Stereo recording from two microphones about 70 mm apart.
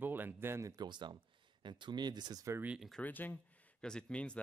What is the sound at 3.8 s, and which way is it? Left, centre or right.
Speech, centre.